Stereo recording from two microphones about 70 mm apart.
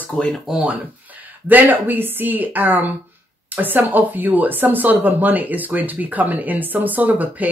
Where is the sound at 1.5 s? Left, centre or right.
Right.